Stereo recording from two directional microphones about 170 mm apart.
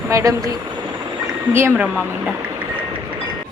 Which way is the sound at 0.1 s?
20° right (ahead or behind).